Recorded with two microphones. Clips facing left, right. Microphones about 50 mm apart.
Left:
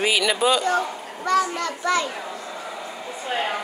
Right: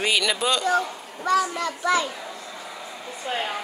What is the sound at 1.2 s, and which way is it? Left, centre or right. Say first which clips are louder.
Speech: left 1 dB; centre.